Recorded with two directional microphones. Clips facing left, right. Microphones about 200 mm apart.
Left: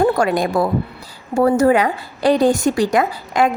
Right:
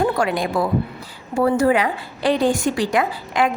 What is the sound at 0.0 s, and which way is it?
A woman's voice, 45° left (ahead or behind).